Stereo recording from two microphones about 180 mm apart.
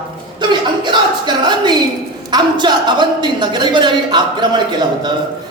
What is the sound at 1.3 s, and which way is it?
A woman's voice, 25° right (ahead or behind).